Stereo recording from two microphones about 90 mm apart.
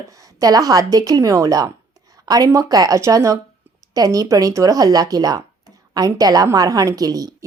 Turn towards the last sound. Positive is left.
turn(degrees=-45)  # may be behind; listen again after turning